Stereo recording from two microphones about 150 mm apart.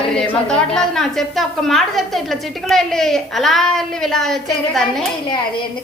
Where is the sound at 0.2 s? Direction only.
5° left (ahead or behind).